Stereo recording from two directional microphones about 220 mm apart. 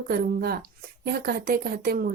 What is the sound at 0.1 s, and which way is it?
A woman's voice, 45° right (ahead or behind).